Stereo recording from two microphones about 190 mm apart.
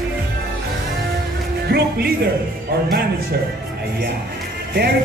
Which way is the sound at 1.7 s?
55° right (ahead or behind).